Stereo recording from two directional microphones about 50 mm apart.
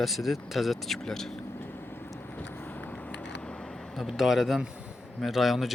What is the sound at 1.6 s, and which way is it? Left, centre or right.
Vehicle, left.